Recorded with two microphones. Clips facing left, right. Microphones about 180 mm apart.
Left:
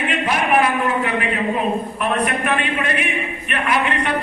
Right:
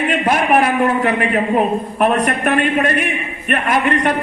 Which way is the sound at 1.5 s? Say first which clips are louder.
Right 5 dB; 50° right (ahead or behind).